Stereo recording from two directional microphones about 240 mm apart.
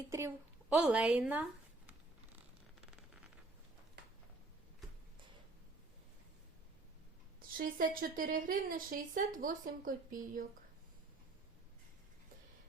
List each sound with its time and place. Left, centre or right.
0.7 s a woman's voice: centre
7.5 s speech: right